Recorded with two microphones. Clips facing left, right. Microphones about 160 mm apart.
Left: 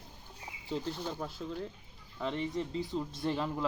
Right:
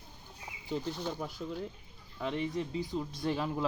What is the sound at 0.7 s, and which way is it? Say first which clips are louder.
Speech: right 1 dB; centre (ahead or behind).